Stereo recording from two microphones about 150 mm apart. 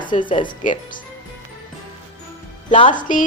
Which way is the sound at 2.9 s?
60° left (ahead or behind).